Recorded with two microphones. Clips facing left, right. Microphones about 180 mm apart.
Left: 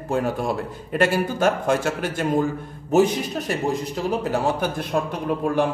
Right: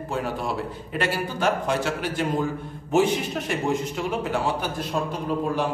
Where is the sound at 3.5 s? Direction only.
35° left (ahead or behind).